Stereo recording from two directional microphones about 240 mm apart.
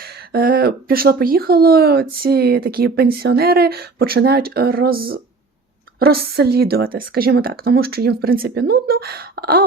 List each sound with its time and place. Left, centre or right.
0.3 s speech: right